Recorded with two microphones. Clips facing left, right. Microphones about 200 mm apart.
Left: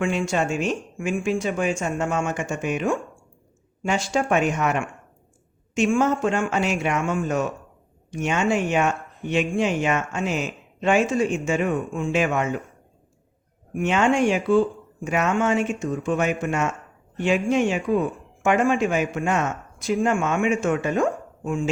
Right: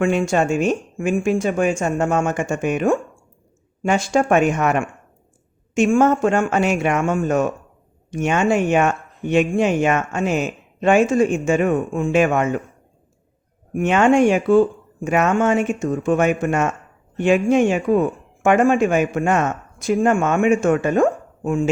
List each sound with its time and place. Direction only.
0.0 s speech: 50° right (ahead or behind)
13.7 s speech: 50° right (ahead or behind)